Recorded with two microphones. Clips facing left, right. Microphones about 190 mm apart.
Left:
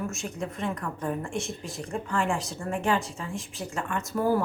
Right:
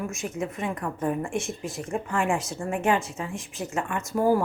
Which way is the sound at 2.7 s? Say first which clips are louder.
Right 2 dB; 15° right (ahead or behind).